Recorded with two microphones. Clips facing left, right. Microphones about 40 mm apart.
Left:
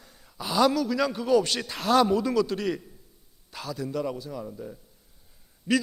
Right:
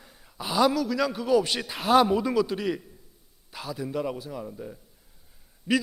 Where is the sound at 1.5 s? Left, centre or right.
Centre.